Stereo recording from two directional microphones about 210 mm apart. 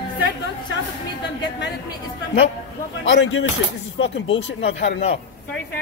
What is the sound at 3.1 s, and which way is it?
Speech, 65° left (ahead or behind).